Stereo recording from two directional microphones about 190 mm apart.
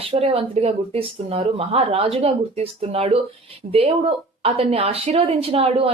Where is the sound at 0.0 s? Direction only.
30° right (ahead or behind).